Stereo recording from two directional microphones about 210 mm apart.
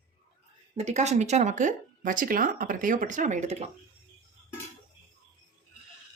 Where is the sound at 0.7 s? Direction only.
30° right (ahead or behind).